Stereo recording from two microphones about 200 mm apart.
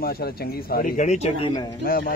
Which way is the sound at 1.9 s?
45° left (ahead or behind).